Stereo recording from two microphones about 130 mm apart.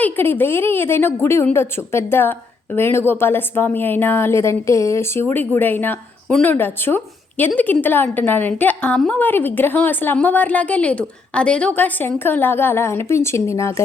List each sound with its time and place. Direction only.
0.0 s a woman's voice: 15° left (ahead or behind)